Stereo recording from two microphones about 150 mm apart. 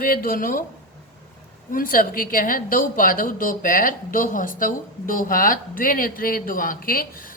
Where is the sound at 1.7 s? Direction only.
65° left (ahead or behind).